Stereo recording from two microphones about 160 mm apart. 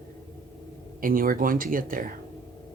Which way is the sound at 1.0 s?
60° right (ahead or behind).